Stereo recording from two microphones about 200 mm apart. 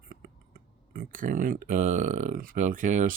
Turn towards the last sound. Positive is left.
turn(degrees=-40)  # may be behind; listen again after turning